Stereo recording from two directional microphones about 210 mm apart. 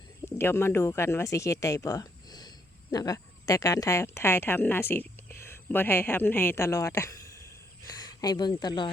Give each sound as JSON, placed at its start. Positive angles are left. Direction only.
{"t": 0.3, "sound": "speech", "side_deg": 10}